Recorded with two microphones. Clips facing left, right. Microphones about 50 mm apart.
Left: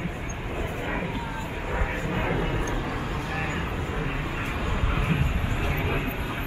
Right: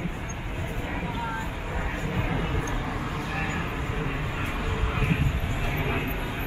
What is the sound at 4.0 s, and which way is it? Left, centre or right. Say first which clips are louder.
Vehicle: left 1 dB; centre.